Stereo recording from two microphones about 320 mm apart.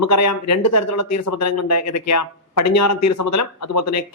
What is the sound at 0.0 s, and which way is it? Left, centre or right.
Speech, left.